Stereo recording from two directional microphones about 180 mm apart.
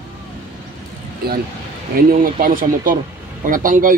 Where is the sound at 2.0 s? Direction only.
50° right (ahead or behind).